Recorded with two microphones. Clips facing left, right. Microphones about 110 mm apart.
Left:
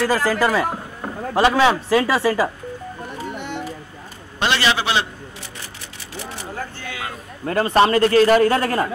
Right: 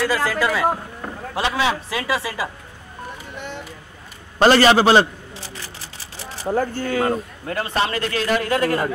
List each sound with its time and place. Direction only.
0.0 s a man's voice: 40° left (ahead or behind)
4.4 s a sound: 40° right (ahead or behind)
6.1 s speech: 40° right (ahead or behind)
7.4 s a man's voice: 45° left (ahead or behind)